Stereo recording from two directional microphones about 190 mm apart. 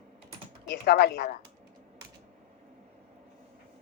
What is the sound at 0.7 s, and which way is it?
Speech, 50° left (ahead or behind).